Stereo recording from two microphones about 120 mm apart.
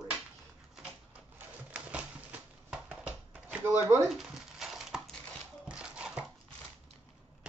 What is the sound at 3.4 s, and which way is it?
Speech, 20° right (ahead or behind).